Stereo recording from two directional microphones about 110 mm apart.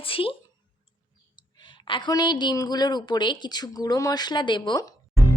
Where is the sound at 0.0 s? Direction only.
55° left (ahead or behind).